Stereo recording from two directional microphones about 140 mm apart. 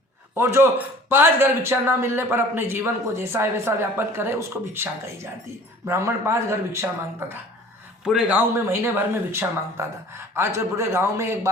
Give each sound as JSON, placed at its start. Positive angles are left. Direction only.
{"t": 0.3, "sound": "a man's voice", "side_deg": -15}
{"t": 8.0, "sound": "a man's voice", "side_deg": -10}